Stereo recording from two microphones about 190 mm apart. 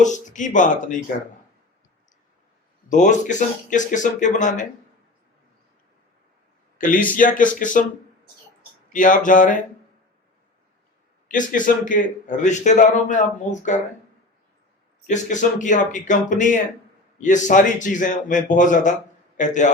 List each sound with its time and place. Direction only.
0.0 s a man's voice: 40° left (ahead or behind)
2.9 s a man's voice: 40° left (ahead or behind)
6.7 s speech: 45° left (ahead or behind)
8.9 s speech: 45° left (ahead or behind)
11.3 s a man's voice: 45° left (ahead or behind)
15.0 s a man's voice: 40° left (ahead or behind)